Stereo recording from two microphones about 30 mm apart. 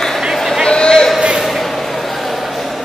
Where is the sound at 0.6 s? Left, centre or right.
Left.